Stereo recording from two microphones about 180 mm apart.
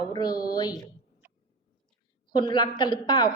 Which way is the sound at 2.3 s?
25° left (ahead or behind).